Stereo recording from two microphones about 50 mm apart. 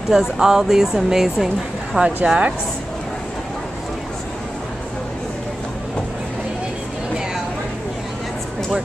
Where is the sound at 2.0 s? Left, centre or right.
Right.